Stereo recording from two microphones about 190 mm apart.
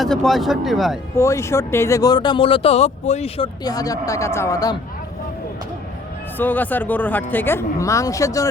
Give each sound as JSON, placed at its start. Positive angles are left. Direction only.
{"t": 0.0, "sound": "speech", "side_deg": 0}
{"t": 1.1, "sound": "speech", "side_deg": 15}
{"t": 6.4, "sound": "speech", "side_deg": 10}